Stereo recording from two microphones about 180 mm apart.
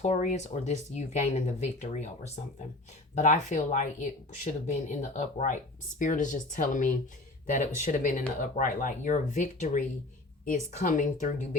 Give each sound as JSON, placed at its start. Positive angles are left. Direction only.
{"t": 0.0, "sound": "speech", "side_deg": 40}